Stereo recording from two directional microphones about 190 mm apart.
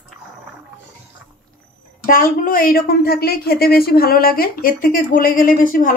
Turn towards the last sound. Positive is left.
turn(degrees=45)  # may be behind; listen again after turning